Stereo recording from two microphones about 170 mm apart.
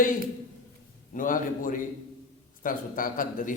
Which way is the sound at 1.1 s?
50° left (ahead or behind).